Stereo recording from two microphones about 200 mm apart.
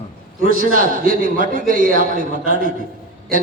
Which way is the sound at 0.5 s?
45° right (ahead or behind).